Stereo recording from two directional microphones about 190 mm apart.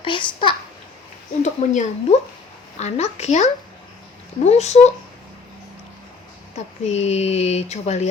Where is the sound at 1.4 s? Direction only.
40° left (ahead or behind).